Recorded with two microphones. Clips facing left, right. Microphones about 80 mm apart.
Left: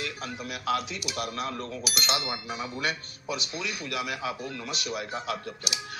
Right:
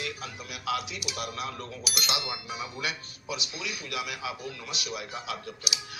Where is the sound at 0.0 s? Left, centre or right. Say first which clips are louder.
Left 2 dB; left.